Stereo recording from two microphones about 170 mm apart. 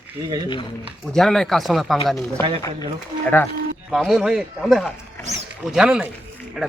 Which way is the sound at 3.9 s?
Centre (ahead or behind).